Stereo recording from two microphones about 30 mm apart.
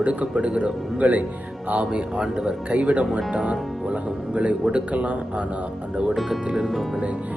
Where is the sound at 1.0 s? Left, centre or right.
Right.